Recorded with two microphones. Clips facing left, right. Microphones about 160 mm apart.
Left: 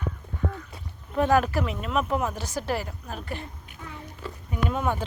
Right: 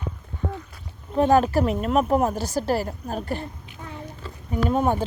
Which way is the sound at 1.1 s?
30° right (ahead or behind).